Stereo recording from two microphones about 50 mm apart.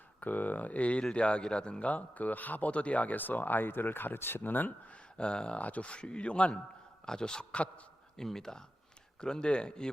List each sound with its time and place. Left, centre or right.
0.2 s speech: left; by 1.9 s centre
1.9 s speech: left
4.9 s speech: centre
8.1 s speech: centre